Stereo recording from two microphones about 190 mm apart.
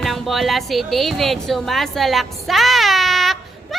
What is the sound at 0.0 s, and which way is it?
A child's voice, centre (ahead or behind).